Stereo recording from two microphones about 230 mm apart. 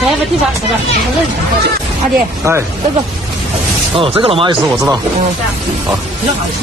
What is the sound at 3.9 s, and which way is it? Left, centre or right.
Speech, right.